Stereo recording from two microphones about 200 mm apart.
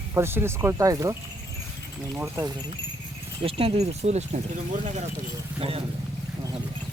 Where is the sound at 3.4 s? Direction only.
30° right (ahead or behind).